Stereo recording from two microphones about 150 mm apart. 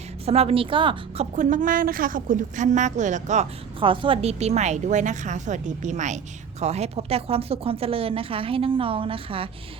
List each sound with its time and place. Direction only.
0.3 s a woman's voice: 40° right (ahead or behind)
3.8 s a woman's voice: 35° right (ahead or behind)